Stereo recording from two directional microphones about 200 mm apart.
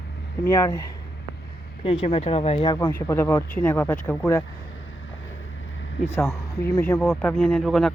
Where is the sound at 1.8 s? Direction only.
30° left (ahead or behind).